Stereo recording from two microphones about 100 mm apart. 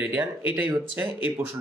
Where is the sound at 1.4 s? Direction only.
30° right (ahead or behind).